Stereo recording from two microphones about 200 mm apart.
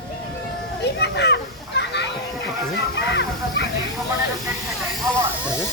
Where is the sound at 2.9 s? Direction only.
60° left (ahead or behind).